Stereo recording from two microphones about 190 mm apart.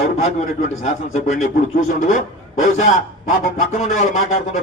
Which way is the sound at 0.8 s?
40° left (ahead or behind).